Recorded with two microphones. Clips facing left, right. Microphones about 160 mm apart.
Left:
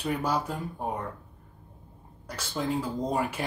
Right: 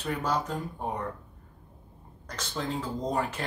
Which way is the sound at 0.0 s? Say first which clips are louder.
Left 1 dB; 10° left (ahead or behind).